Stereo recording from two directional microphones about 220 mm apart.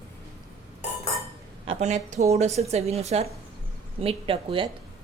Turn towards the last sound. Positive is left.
turn(degrees=-25)  # may be behind; listen again after turning